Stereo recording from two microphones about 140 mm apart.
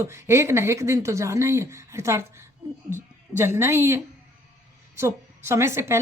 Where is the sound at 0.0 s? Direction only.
20° right (ahead or behind).